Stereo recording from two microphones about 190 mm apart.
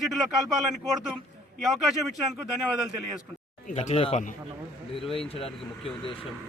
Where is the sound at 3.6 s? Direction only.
40° left (ahead or behind).